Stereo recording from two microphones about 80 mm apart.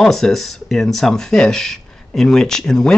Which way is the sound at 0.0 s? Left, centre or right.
Centre.